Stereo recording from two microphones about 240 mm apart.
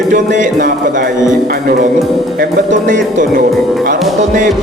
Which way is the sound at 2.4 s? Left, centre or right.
Right.